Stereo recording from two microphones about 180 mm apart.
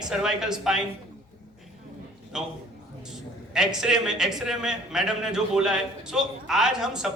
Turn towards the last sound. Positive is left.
turn(degrees=-5)  # may be behind; listen again after turning